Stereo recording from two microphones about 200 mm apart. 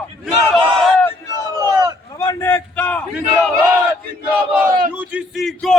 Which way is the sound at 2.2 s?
15° left (ahead or behind).